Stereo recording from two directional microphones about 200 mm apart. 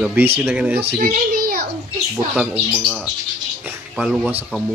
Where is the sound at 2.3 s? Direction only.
5° right (ahead or behind).